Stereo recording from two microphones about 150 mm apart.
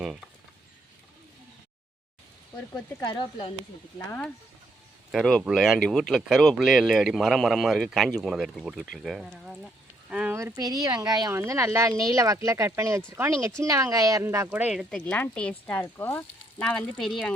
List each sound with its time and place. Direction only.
3.9 s speech: 10° left (ahead or behind)
5.1 s speech: centre (ahead or behind)
10.1 s a sound: 5° right (ahead or behind)
10.3 s speech: 20° right (ahead or behind); by 17.3 s centre (ahead or behind)